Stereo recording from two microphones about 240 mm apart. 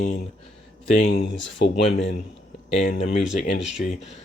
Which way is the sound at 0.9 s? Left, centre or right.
Left.